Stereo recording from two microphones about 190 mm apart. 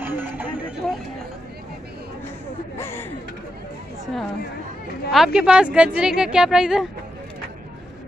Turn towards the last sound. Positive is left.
turn(degrees=-5)  # may be behind; listen again after turning